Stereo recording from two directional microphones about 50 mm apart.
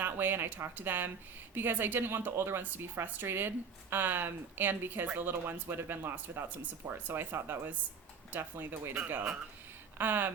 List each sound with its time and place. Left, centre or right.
0.0 s speech: right
10.0 s speech: right